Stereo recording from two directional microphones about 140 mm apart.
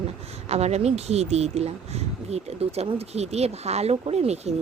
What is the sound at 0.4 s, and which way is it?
Speech, 50° right (ahead or behind).